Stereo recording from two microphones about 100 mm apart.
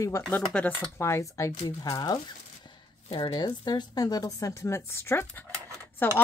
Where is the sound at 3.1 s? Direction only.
50° left (ahead or behind).